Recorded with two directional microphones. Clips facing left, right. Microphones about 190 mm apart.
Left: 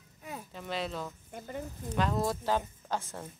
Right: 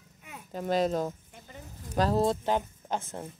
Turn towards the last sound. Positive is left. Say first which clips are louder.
# right 2 dB
turn(degrees=-20)  # may be behind; listen again after turning